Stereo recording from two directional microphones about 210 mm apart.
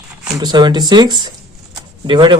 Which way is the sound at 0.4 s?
20° right (ahead or behind).